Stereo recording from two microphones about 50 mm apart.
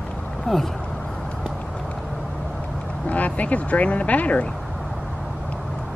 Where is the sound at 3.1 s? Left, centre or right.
Left.